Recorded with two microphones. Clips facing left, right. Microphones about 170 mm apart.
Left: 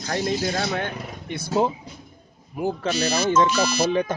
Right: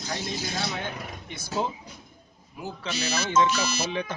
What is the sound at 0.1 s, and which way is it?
Speech, 60° left (ahead or behind).